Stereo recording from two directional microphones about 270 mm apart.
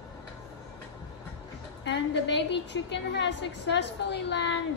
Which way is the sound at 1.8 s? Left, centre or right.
Left.